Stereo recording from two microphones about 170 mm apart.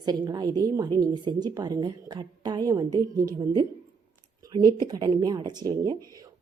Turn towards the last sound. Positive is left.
turn(degrees=-25)  # may be behind; listen again after turning